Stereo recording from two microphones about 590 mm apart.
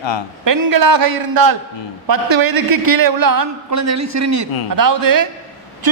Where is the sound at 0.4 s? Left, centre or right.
Right.